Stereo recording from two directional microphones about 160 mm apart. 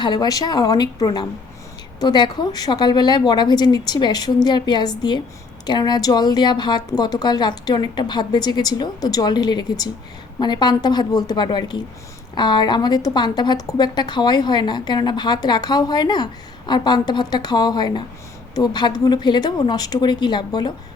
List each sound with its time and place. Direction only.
0.0 s a woman's voice: 25° left (ahead or behind)